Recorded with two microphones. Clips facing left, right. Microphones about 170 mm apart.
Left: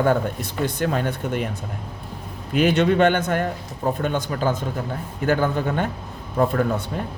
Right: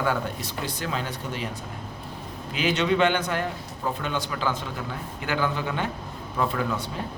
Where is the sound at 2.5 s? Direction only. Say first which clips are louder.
Left 5 dB; 55° left (ahead or behind).